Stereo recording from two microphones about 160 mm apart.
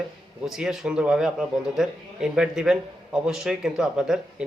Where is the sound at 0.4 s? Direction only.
Centre (ahead or behind).